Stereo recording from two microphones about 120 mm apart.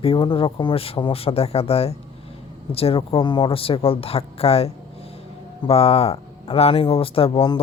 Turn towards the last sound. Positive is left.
turn(degrees=50)  # may be behind; listen again after turning